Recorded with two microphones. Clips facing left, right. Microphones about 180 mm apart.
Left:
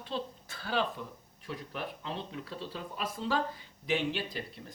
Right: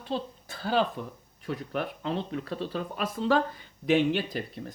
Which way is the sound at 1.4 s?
60° right (ahead or behind).